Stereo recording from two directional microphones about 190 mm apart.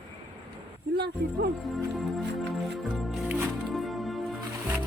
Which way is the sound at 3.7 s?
Centre (ahead or behind).